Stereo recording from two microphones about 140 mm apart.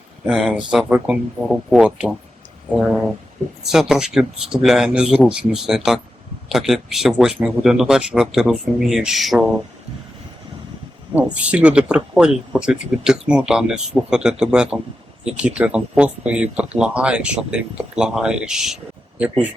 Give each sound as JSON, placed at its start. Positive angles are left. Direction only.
{"t": 0.3, "sound": "speech", "side_deg": -5}
{"t": 3.7, "sound": "speech", "side_deg": -5}
{"t": 11.1, "sound": "speech", "side_deg": -10}